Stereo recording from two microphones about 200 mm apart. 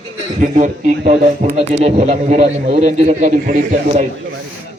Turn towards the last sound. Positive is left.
turn(degrees=-40)  # may be behind; listen again after turning